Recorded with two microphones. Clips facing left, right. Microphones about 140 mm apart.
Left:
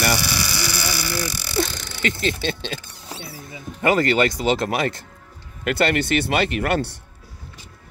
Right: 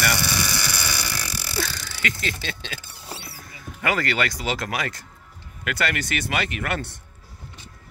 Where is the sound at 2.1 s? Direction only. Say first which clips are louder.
Left 7 dB; 30° left (ahead or behind).